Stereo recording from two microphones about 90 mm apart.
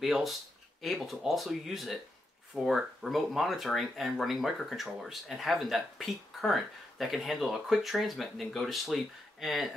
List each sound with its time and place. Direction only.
0.0 s speech: centre (ahead or behind)